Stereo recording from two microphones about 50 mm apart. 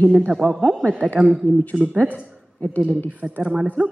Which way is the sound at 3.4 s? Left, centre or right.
Centre.